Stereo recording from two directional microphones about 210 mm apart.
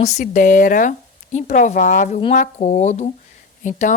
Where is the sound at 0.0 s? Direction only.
35° left (ahead or behind).